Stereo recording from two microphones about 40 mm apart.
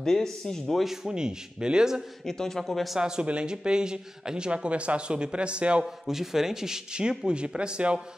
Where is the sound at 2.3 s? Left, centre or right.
Centre.